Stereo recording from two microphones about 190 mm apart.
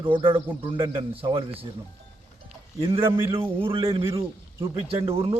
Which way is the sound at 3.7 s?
30° right (ahead or behind).